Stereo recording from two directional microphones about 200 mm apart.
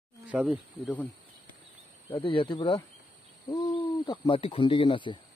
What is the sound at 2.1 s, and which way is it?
Speech, 25° left (ahead or behind).